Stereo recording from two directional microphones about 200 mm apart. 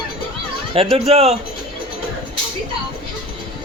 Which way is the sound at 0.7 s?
30° right (ahead or behind).